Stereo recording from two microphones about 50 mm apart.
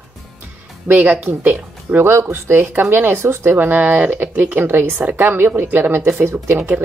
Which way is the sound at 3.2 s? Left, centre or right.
Right.